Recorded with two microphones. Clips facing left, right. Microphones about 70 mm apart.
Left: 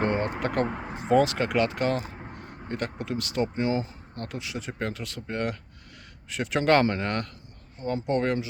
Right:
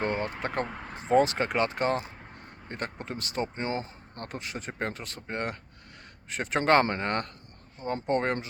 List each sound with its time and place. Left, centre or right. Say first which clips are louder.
0.0 s a sound: left 3 dB; left
0.7 s speech: left 5 dB; centre
1.1 s speech: left 2 dB; right